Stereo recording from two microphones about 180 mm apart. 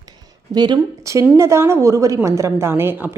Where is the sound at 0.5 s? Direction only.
25° right (ahead or behind).